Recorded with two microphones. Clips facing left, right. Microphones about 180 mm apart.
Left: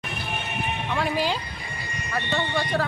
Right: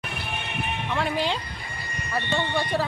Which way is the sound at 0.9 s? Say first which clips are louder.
Left 1 dB; centre (ahead or behind).